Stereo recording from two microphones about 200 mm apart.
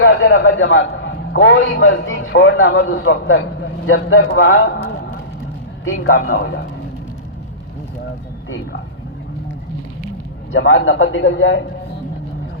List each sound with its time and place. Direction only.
0.0 s a man's voice: 70° left (ahead or behind)
5.8 s a man's voice: 85° left
6.3 s a man's voice: 50° left (ahead or behind)
10.5 s a man's voice: 75° left (ahead or behind)